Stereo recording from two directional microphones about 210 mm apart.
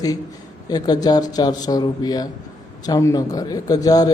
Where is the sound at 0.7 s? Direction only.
20° left (ahead or behind).